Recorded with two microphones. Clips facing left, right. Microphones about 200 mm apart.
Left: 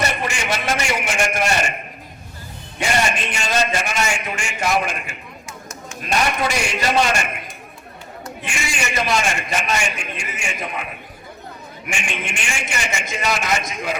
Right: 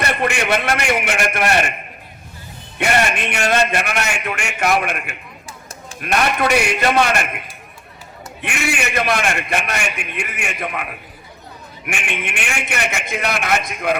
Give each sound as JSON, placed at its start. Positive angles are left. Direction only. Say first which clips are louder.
{"t": 0.1, "sound": "a sound", "louder": "right 5 dB", "side_deg": -60}
{"t": 2.7, "sound": "a man's voice", "louder": "right 3 dB", "side_deg": -60}
{"t": 8.4, "sound": "a man's voice", "louder": "right 5 dB", "side_deg": -60}
{"t": 11.9, "sound": "a man's voice", "louder": "right 2 dB", "side_deg": -60}